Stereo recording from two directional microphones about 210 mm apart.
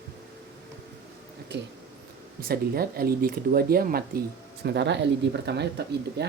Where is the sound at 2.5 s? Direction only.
45° right (ahead or behind).